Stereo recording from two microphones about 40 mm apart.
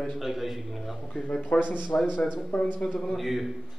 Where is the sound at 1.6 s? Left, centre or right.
Right.